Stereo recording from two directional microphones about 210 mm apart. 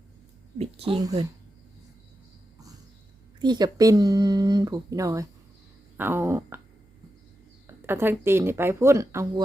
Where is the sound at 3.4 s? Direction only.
20° right (ahead or behind).